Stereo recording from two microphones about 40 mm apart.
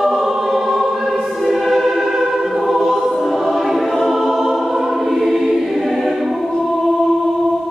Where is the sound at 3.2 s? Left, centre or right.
Centre.